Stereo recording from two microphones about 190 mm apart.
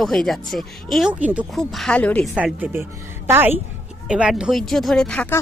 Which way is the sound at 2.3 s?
10° right (ahead or behind).